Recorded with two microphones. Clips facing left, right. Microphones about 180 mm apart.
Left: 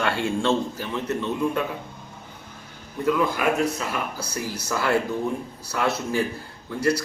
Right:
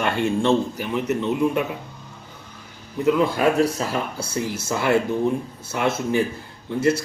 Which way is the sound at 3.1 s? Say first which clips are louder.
Right 3 dB; 25° right (ahead or behind).